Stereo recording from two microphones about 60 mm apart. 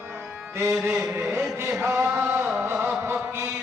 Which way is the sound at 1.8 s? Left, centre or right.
Right.